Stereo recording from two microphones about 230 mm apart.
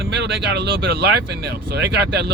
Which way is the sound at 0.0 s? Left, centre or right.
Right.